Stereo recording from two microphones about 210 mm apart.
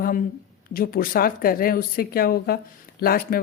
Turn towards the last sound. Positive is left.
turn(degrees=45)  # may be behind; listen again after turning